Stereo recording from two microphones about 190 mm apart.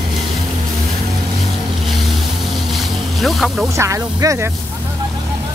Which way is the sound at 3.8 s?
15° right (ahead or behind).